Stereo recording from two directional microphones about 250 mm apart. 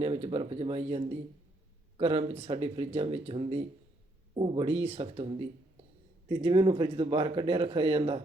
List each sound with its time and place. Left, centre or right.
0.0 s a man's voice: right